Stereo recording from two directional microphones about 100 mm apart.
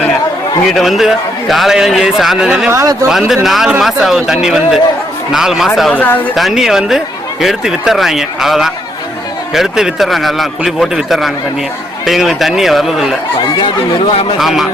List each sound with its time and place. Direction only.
0.7 s speech: centre (ahead or behind)
2.6 s speech: 30° right (ahead or behind)
3.1 s speech: 5° right (ahead or behind)
5.9 s speech: 15° left (ahead or behind)
6.3 s speech: centre (ahead or behind)
13.6 s a man's voice: 65° left (ahead or behind)
14.3 s speech: centre (ahead or behind)